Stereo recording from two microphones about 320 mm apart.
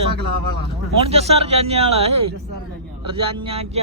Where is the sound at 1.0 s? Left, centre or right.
Centre.